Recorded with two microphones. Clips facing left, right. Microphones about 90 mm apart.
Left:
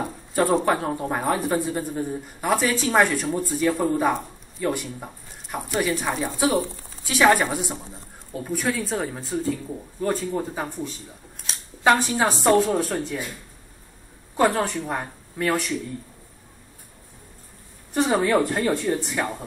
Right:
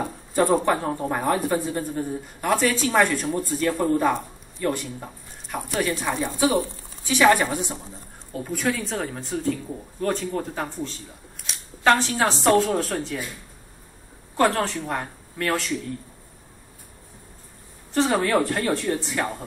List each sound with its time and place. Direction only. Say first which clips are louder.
0.3 s speech: even; centre (ahead or behind)
6.0 s a woman's voice: even; 15° left (ahead or behind)
7.1 s a woman's voice: even; 5° left (ahead or behind)
14.3 s a woman's voice: even; 10° left (ahead or behind)
17.9 s a woman's voice: left 1 dB; 10° left (ahead or behind)
19.0 s speech: even; 5° left (ahead or behind)